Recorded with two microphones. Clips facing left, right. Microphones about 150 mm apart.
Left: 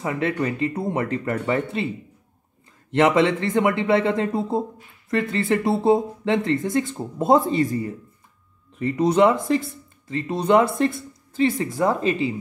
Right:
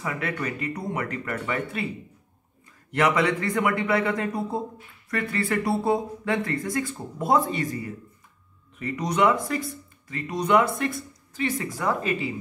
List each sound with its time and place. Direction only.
0.0 s speech: 25° left (ahead or behind)
2.9 s speech: 25° left (ahead or behind)